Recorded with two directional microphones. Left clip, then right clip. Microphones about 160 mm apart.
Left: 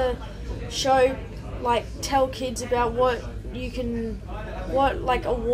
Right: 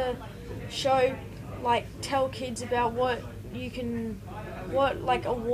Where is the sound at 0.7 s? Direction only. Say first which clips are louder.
Left 5 dB; 45° right (ahead or behind).